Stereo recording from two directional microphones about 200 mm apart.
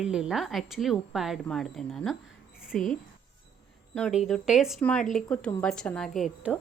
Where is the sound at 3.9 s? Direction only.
Centre (ahead or behind).